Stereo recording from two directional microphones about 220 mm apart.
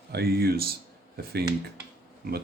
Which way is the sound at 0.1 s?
45° right (ahead or behind).